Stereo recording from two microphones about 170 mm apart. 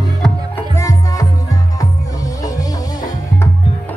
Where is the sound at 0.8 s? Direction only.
20° left (ahead or behind).